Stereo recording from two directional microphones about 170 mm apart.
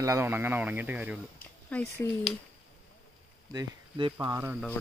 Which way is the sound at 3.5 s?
25° right (ahead or behind).